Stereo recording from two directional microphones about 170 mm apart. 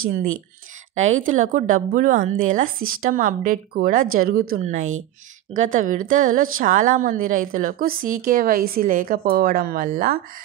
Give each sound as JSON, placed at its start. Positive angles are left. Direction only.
{"t": 0.9, "sound": "a woman's voice", "side_deg": -45}
{"t": 4.6, "sound": "a woman's voice", "side_deg": -45}